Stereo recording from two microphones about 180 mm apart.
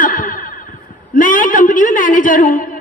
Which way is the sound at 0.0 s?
50° left (ahead or behind).